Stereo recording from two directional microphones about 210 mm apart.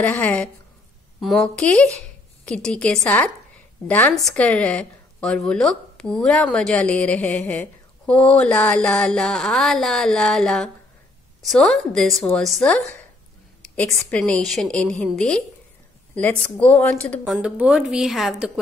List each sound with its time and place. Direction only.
0.0 s a woman's voice: 5° left (ahead or behind)
16.5 s speech: 5° left (ahead or behind)
17.2 s a woman's voice: 5° right (ahead or behind)